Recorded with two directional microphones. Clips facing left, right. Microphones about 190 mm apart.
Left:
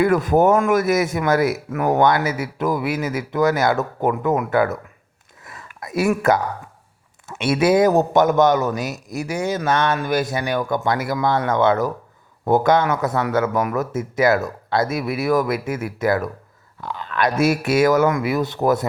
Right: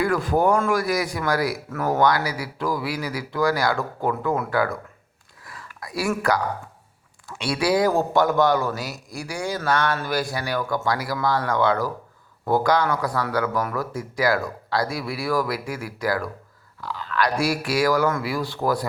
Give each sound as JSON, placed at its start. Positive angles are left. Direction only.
{"t": 0.0, "sound": "speech", "side_deg": 20}
{"t": 5.5, "sound": "whispering", "side_deg": 20}
{"t": 7.3, "sound": "speech", "side_deg": 20}